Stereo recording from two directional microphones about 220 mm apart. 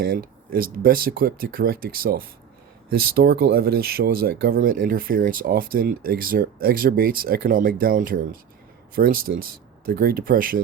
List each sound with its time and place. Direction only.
0.0 s speech: 40° right (ahead or behind)